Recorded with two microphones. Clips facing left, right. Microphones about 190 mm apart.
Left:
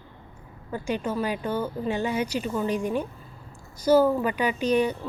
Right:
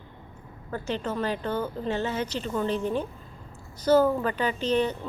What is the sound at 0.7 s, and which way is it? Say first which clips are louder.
Speech: left 2 dB; 10° left (ahead or behind).